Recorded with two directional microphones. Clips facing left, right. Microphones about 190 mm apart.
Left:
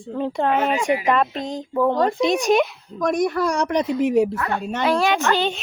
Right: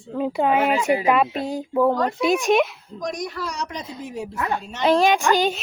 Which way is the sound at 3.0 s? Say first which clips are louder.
Left 8 dB; 55° left (ahead or behind).